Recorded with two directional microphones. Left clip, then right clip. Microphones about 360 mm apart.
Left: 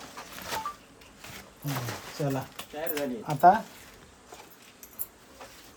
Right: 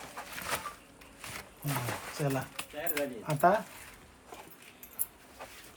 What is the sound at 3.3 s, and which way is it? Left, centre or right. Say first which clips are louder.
Speech: left 7 dB; centre.